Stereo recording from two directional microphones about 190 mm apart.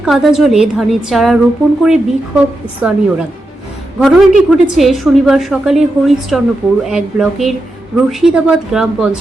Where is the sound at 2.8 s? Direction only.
10° right (ahead or behind).